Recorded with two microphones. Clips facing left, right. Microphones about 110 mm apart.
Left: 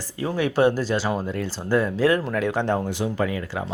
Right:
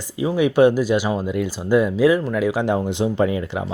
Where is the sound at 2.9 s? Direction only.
25° right (ahead or behind).